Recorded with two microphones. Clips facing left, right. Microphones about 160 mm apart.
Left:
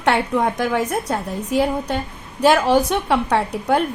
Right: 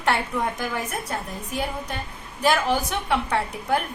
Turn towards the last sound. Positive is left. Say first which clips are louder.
# left 5 dB
turn(degrees=70)  # may be behind; listen again after turning